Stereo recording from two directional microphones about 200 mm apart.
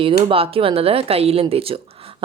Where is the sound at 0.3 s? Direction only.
25° right (ahead or behind).